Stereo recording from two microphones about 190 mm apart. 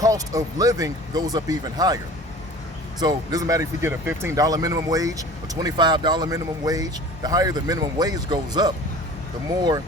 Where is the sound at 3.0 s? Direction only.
20° right (ahead or behind).